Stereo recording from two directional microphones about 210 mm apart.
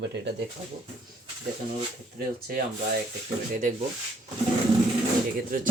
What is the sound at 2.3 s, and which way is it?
Speech, 45° right (ahead or behind).